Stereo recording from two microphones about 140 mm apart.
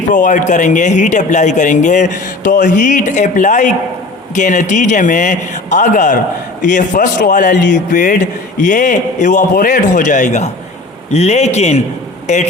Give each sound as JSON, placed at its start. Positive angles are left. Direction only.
{"t": 0.1, "sound": "speech", "side_deg": 65}